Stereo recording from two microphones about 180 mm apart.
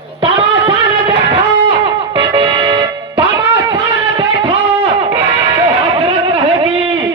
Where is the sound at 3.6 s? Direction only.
30° right (ahead or behind).